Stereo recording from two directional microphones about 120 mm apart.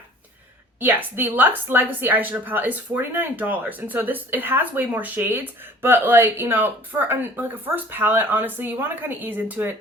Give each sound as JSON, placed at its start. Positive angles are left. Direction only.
{"t": 0.8, "sound": "a woman's voice", "side_deg": -15}